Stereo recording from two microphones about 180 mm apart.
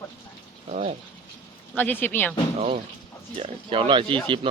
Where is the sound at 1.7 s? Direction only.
10° left (ahead or behind).